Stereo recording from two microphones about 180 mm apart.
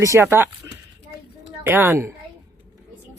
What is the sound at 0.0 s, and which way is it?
Speech, 15° right (ahead or behind).